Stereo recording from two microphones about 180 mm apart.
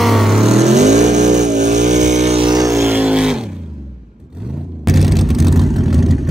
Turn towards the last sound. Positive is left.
turn(degrees=0)  # may be behind; listen again after turning